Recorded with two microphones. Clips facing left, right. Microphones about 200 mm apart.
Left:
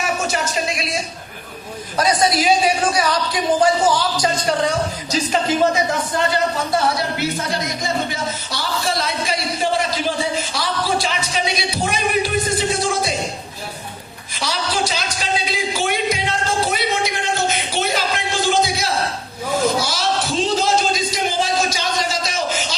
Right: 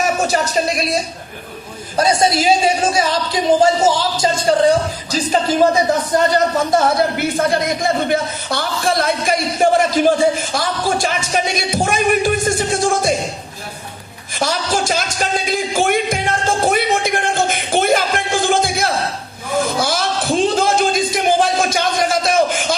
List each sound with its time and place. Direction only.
0.0 s speech: 40° right (ahead or behind)
2.0 s a woman's voice: 25° right (ahead or behind)
5.1 s music: 35° right (ahead or behind)
6.3 s speech: 45° right (ahead or behind)
14.3 s music: 50° right (ahead or behind)
19.6 s a sound: 55° right (ahead or behind)